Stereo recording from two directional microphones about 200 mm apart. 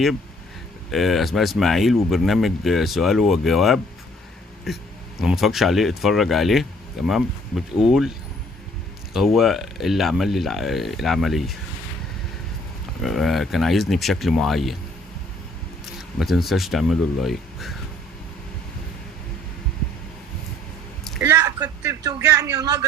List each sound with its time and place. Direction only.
0.9 s speech: centre (ahead or behind)
9.1 s speech: centre (ahead or behind)
13.0 s speech: centre (ahead or behind)
16.0 s speech: centre (ahead or behind)
21.2 s a sound: 10° right (ahead or behind)